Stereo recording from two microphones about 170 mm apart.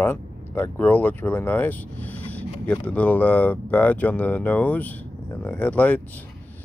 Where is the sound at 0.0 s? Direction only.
10° left (ahead or behind).